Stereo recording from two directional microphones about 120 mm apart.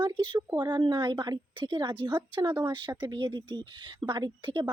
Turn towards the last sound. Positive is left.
turn(degrees=-40)  # may be behind; listen again after turning